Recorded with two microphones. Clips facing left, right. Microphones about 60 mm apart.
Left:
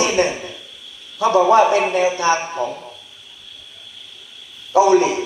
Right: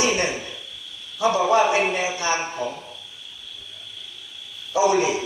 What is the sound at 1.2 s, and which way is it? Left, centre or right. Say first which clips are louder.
Speech: left 5 dB; left.